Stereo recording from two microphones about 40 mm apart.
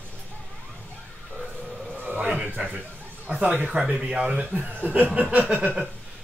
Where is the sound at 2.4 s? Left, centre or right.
Right.